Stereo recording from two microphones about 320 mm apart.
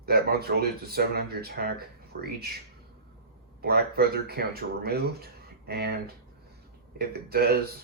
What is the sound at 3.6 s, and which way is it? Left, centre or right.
Speech, right.